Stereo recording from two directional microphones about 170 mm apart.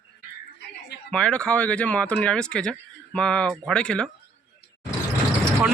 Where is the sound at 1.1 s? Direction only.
5° left (ahead or behind).